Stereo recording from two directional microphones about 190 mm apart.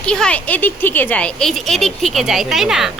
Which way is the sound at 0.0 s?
5° left (ahead or behind).